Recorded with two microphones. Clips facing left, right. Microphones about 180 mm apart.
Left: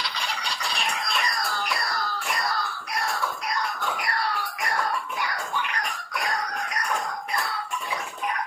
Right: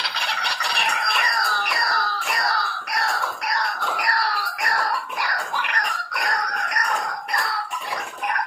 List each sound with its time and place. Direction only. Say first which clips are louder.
0.0 s music: right 2 dB; 70° right (ahead or behind)
7.3 s cough: right 3 dB; 80° right